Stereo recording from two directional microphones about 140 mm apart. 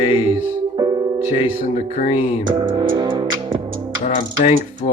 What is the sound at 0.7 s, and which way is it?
Music, 30° right (ahead or behind).